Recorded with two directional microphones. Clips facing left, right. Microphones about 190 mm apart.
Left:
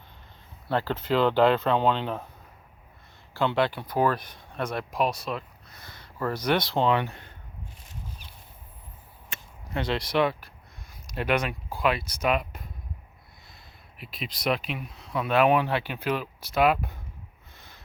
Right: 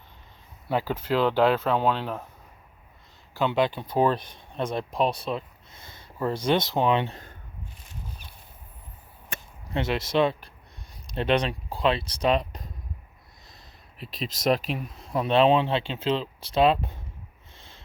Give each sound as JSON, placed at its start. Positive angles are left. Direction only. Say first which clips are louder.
{"t": 0.7, "sound": "speech", "louder": "even", "side_deg": -10}
{"t": 3.3, "sound": "speech", "louder": "right 1 dB", "side_deg": -15}
{"t": 9.7, "sound": "speech", "louder": "right 2 dB", "side_deg": -20}
{"t": 14.0, "sound": "speech", "louder": "right 4 dB", "side_deg": -40}
{"t": 15.2, "sound": "speech", "louder": "right 2 dB", "side_deg": -25}